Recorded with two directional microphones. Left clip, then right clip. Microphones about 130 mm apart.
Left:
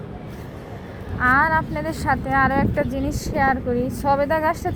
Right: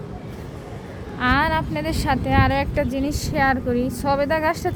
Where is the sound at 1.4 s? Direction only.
25° right (ahead or behind).